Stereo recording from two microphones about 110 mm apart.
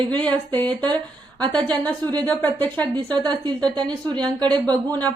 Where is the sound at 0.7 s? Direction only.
40° right (ahead or behind).